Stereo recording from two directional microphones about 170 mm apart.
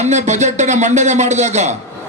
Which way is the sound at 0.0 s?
40° right (ahead or behind).